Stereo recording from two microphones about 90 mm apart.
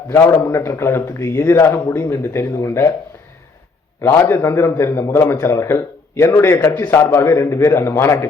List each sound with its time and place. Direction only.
0.1 s a man's voice: 30° left (ahead or behind)
4.0 s a man's voice: 25° left (ahead or behind)